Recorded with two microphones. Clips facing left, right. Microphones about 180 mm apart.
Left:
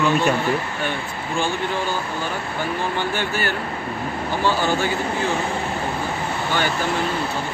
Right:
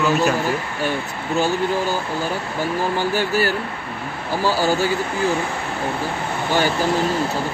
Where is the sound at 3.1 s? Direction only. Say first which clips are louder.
Right 5 dB; 40° right (ahead or behind).